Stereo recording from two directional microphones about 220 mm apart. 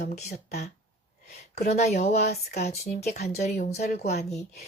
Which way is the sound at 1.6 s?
30° left (ahead or behind).